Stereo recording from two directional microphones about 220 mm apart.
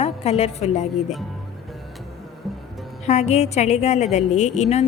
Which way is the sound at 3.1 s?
30° left (ahead or behind).